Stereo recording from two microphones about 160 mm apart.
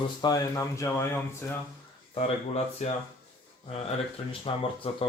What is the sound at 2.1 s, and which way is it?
Speech, 40° left (ahead or behind).